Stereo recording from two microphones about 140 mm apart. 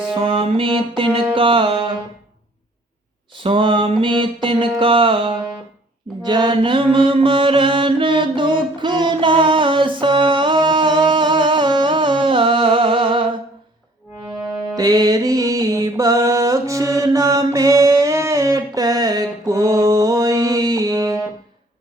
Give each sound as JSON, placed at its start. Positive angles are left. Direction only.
{"t": 0.1, "sound": "mantra", "side_deg": -40}
{"t": 3.3, "sound": "mantra", "side_deg": -35}
{"t": 14.3, "sound": "music", "side_deg": -5}
{"t": 14.8, "sound": "music", "side_deg": -25}